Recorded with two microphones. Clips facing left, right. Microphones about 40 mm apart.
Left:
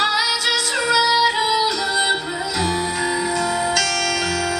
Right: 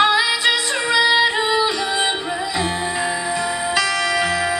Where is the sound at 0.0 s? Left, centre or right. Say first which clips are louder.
Right 3 dB; right.